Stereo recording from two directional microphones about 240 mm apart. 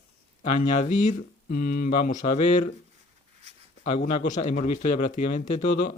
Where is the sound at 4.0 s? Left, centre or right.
Left.